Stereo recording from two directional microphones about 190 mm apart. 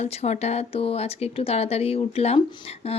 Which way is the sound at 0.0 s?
35° left (ahead or behind).